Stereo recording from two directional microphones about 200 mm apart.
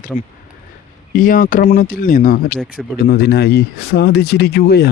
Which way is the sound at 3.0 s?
55° left (ahead or behind).